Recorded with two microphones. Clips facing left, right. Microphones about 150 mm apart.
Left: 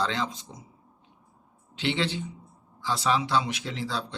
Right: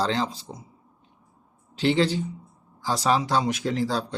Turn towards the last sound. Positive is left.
turn(degrees=-45)  # may be behind; listen again after turning